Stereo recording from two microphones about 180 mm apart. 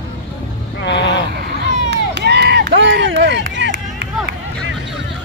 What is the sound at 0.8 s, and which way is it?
Vehicle, 75° left (ahead or behind).